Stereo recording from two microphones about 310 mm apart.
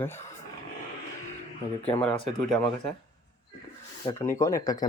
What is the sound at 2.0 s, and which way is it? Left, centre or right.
Speech, centre.